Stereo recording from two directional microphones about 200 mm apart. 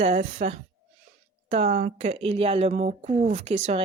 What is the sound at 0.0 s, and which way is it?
Speech, 35° right (ahead or behind).